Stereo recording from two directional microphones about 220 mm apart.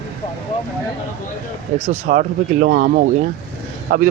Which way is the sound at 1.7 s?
30° right (ahead or behind).